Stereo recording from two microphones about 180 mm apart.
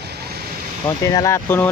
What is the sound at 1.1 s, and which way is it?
Speech, 20° left (ahead or behind).